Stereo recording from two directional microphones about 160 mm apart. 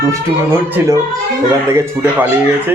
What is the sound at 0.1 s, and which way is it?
Speech, 15° right (ahead or behind).